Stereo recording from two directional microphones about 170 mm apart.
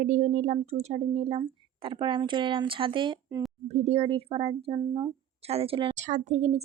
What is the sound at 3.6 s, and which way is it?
A woman's voice, 40° right (ahead or behind).